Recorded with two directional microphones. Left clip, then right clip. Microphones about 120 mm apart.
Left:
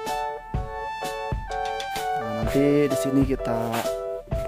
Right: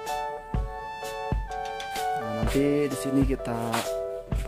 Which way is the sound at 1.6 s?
Centre (ahead or behind).